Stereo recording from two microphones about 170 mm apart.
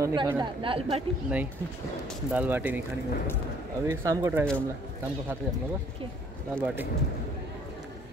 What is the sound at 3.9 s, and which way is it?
Speech, 15° right (ahead or behind).